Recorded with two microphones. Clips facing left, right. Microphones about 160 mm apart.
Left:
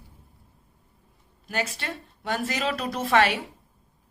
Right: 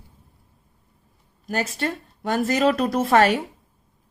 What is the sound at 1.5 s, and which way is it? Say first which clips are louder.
Speech: right 5 dB; 40° right (ahead or behind).